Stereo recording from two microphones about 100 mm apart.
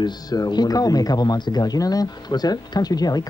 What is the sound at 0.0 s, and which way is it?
Speech, 45° left (ahead or behind).